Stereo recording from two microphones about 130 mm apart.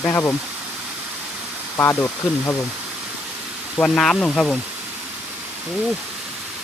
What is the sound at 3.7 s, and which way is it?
Speech, 10° left (ahead or behind).